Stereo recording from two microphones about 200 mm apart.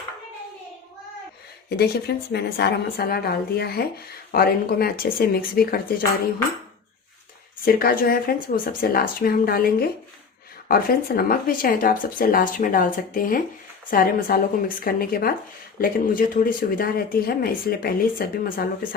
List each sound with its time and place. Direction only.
1.9 s speech: 55° left (ahead or behind)
7.6 s speech: 45° left (ahead or behind)